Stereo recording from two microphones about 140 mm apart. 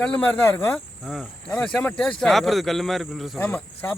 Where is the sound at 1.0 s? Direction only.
Centre (ahead or behind).